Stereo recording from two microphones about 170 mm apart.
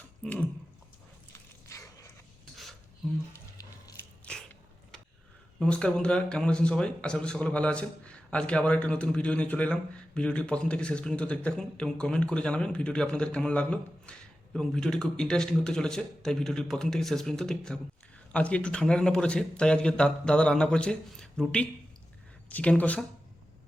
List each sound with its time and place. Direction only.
1.3 s biting: 15° left (ahead or behind)
4.3 s biting: 5° left (ahead or behind)
5.5 s a man's voice: 5° left (ahead or behind)